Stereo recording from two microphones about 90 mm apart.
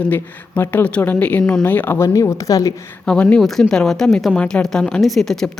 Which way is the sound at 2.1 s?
35° left (ahead or behind).